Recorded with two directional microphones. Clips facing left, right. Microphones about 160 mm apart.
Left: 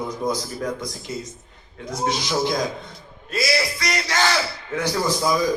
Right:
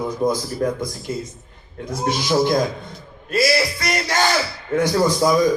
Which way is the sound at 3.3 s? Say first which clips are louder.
Right 5 dB; 55° right (ahead or behind).